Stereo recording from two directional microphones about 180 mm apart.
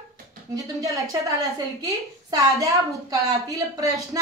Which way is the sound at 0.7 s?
20° right (ahead or behind).